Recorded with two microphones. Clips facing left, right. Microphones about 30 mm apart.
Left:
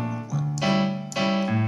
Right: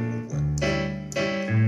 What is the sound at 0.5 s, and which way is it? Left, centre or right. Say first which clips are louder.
Keyboard: left 3 dB; left.